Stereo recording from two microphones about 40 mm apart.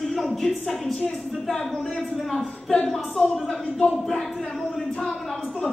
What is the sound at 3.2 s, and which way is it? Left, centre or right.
Speech, left.